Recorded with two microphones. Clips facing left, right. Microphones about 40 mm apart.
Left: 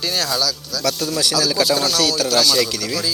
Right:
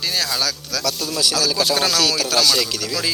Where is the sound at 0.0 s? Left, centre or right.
Centre.